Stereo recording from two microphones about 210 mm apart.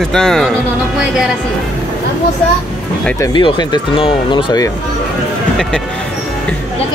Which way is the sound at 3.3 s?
25° left (ahead or behind).